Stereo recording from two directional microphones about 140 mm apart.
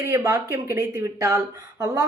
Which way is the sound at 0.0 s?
20° right (ahead or behind).